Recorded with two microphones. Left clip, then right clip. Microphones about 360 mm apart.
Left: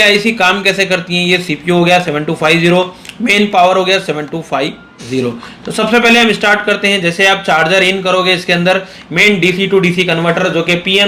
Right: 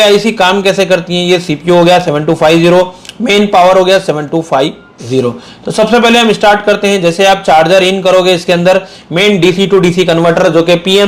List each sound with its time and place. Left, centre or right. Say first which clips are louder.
0.0 s speech: right 2 dB; right
5.7 s speech: right 2 dB; right